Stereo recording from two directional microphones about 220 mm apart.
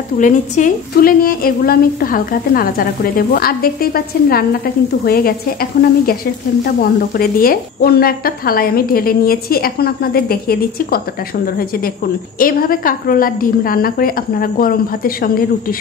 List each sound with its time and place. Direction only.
0.2 s a woman's voice: 40° left (ahead or behind)
12.4 s a woman's voice: 40° left (ahead or behind)